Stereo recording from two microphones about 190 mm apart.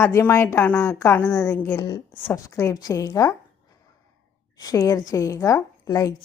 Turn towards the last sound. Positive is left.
turn(degrees=15)  # may be behind; listen again after turning